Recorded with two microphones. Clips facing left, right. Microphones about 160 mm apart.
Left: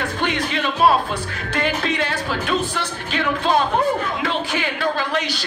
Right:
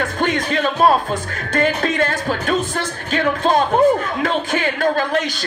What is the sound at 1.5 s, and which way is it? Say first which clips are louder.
A woman's voice: right 4 dB; 45° right (ahead or behind).